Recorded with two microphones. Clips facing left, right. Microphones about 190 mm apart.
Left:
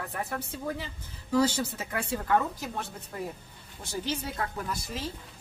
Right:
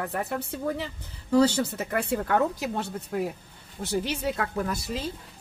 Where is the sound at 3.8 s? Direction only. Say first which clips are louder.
Right 6 dB; 70° right (ahead or behind).